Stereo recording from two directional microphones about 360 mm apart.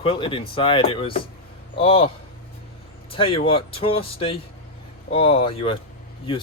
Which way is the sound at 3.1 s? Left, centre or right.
Centre.